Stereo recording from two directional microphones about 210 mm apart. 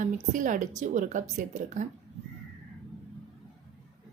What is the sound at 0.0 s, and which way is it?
Speech, 40° right (ahead or behind).